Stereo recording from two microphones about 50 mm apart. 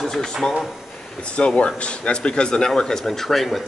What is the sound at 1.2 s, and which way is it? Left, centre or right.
Speech, left.